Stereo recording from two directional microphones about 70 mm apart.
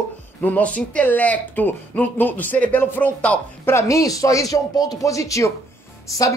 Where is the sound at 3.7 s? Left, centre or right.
Left.